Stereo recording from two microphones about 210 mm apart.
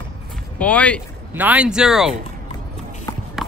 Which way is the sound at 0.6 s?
5° left (ahead or behind).